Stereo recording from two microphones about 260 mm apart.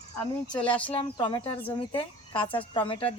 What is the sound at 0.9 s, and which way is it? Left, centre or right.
Speech, centre.